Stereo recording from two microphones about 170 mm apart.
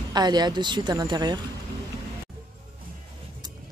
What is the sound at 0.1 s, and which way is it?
A woman's voice, 25° right (ahead or behind).